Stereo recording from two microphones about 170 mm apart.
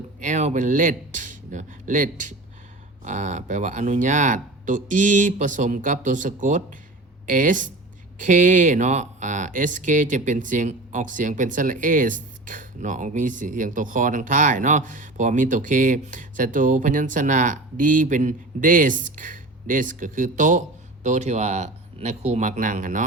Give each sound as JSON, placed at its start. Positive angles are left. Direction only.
{"t": 0.2, "sound": "speech", "side_deg": -45}